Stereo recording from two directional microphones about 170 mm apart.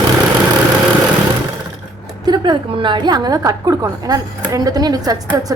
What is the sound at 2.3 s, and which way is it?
A woman's voice, 25° right (ahead or behind).